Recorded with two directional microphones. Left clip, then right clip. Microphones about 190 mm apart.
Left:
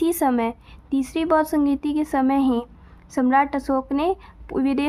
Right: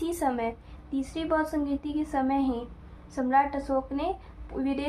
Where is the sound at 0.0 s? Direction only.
45° left (ahead or behind).